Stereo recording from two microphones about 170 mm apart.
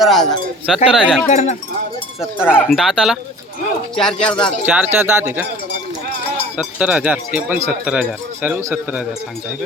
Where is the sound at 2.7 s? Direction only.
5° right (ahead or behind).